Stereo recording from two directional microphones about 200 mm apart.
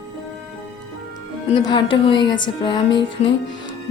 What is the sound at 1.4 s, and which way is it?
Speech, 25° left (ahead or behind).